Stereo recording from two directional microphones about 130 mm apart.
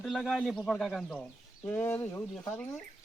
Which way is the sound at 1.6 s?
20° left (ahead or behind).